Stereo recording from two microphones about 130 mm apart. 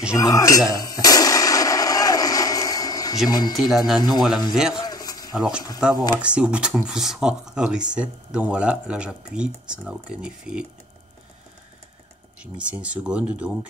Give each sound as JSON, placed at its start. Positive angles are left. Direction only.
{"t": 0.1, "sound": "clang", "side_deg": 25}
{"t": 3.3, "sound": "speech", "side_deg": 30}
{"t": 3.6, "sound": "speech", "side_deg": 0}
{"t": 4.8, "sound": "a sound", "side_deg": 30}
{"t": 5.3, "sound": "speech", "side_deg": -5}
{"t": 12.4, "sound": "speech", "side_deg": -10}